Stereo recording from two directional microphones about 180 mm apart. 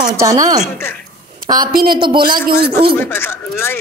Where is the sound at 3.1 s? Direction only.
15° left (ahead or behind).